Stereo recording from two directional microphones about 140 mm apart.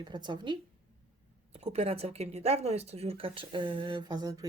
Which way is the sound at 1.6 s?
45° right (ahead or behind).